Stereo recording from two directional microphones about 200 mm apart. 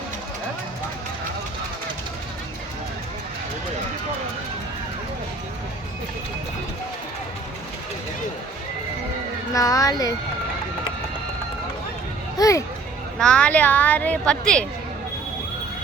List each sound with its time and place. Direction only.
9.6 s a woman's voice: 15° left (ahead or behind)
12.4 s a sound: 15° left (ahead or behind)
13.1 s a woman's voice: 5° left (ahead or behind)